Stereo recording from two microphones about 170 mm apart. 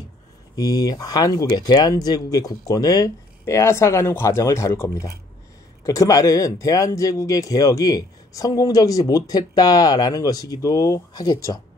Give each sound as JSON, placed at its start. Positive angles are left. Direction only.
{"t": 0.6, "sound": "speech", "side_deg": 20}